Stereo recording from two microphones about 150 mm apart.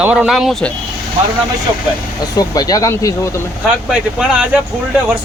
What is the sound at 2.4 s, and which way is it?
Speech, 25° left (ahead or behind).